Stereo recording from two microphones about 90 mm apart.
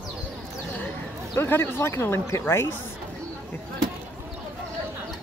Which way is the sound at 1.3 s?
25° left (ahead or behind).